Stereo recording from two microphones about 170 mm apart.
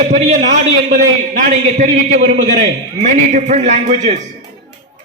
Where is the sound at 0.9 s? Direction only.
55° right (ahead or behind).